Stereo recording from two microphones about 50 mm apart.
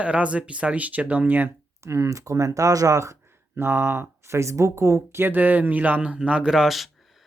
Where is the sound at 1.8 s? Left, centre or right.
Right.